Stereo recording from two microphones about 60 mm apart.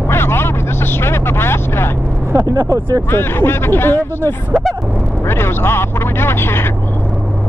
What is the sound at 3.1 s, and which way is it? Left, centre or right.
Speech, left.